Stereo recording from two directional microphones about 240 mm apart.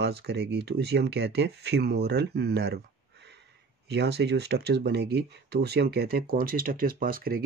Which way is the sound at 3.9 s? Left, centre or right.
Right.